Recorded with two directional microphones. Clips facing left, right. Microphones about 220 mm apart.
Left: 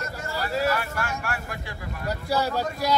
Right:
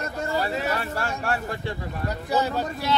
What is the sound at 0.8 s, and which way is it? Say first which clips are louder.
Speech: right 2 dB; 30° right (ahead or behind).